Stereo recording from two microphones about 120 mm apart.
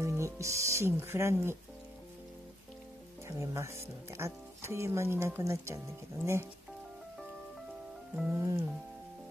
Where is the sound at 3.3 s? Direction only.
25° right (ahead or behind).